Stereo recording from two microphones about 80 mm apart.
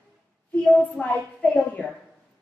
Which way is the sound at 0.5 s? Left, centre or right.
Centre.